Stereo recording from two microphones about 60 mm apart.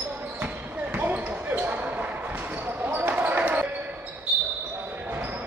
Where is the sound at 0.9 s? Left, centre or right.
Right.